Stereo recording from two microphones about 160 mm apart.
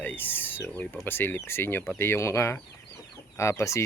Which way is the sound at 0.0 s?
10° left (ahead or behind).